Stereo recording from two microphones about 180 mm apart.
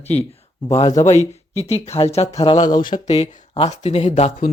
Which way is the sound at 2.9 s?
40° left (ahead or behind).